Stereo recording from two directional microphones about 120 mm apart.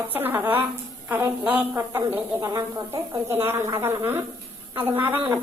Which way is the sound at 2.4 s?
30° right (ahead or behind).